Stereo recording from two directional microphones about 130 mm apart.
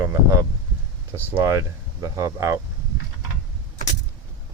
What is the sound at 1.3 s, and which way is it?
Speech, 25° right (ahead or behind).